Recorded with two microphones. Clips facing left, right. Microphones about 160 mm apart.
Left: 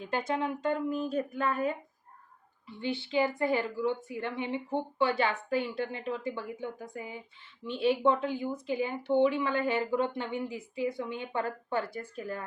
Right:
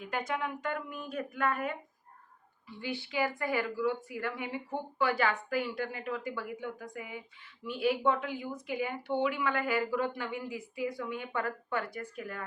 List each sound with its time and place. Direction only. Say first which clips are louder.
0.0 s speech: left 3 dB; 30° left (ahead or behind)
2.8 s speech: left 4 dB; 25° left (ahead or behind)